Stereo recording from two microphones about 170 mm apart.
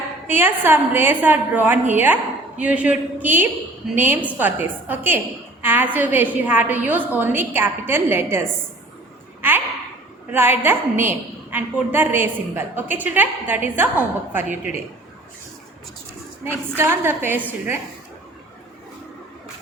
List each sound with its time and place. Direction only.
0.3 s a woman's voice: 10° right (ahead or behind)
10.3 s a woman's voice: 10° right (ahead or behind)
16.7 s a woman's voice: 15° right (ahead or behind)